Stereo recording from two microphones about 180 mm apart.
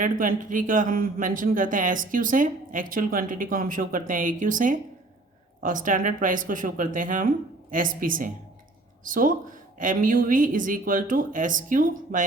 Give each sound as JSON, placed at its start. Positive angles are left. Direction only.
{"t": 0.0, "sound": "speech", "side_deg": -45}